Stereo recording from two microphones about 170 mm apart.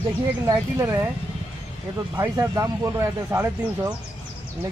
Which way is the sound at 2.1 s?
15° right (ahead or behind).